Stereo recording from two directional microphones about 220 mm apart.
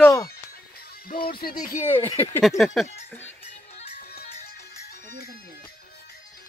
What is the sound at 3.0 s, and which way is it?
Music, 10° left (ahead or behind).